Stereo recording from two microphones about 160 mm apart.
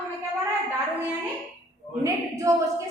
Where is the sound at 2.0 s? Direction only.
20° right (ahead or behind).